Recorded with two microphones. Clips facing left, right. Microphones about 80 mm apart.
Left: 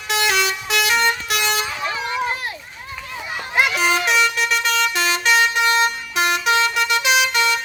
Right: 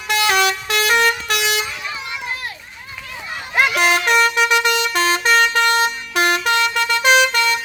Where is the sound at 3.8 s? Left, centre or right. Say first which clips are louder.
Right 5 dB; right.